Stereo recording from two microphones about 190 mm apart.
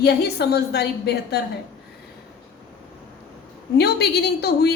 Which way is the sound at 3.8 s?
60° left (ahead or behind).